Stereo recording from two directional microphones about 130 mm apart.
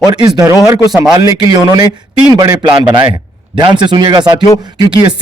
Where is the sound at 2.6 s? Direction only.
40° right (ahead or behind).